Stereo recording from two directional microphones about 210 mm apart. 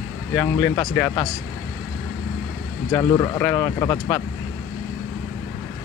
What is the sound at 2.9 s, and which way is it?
Speech, 15° left (ahead or behind).